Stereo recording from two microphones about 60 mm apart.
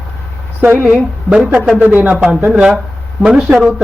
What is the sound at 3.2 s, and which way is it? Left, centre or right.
Speech, centre.